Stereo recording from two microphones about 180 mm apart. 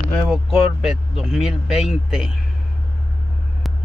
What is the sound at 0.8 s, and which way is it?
Speech, centre (ahead or behind).